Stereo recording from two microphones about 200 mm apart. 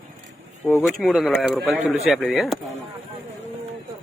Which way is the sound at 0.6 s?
5° left (ahead or behind).